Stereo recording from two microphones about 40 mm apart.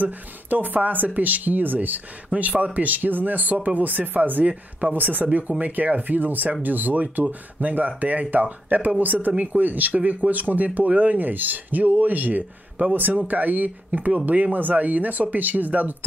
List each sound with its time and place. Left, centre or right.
0.0 s speech: right
2.2 s speech: right